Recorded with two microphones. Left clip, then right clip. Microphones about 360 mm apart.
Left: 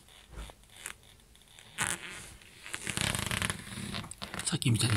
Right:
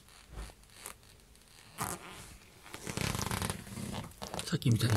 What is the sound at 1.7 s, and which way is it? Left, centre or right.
Fart, centre.